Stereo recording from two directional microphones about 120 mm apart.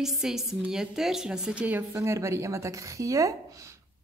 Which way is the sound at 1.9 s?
25° right (ahead or behind).